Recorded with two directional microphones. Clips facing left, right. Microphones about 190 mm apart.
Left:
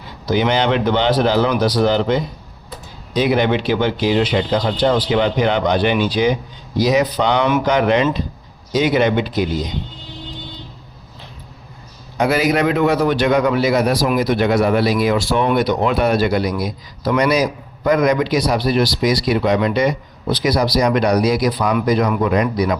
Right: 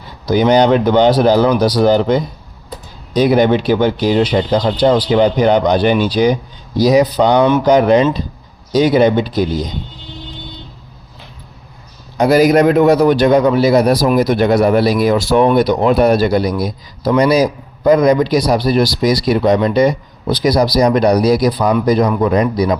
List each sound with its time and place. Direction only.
0.3 s a man's voice: 40° right (ahead or behind)
12.1 s a man's voice: 40° right (ahead or behind)